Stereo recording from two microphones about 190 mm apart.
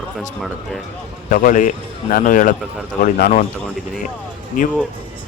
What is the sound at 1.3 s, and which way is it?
Speech, 45° left (ahead or behind).